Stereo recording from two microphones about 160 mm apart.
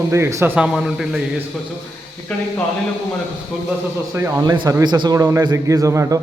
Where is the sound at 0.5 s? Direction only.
5° right (ahead or behind).